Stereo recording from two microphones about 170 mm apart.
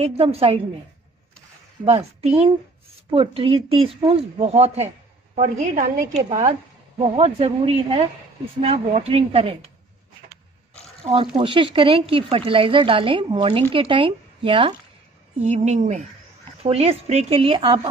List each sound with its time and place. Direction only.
0.0 s a woman's voice: 35° right (ahead or behind)
1.9 s a woman's voice: 35° right (ahead or behind)
7.0 s a woman's voice: 40° right (ahead or behind)
11.3 s a woman's voice: 30° right (ahead or behind)
15.4 s a woman's voice: 45° right (ahead or behind)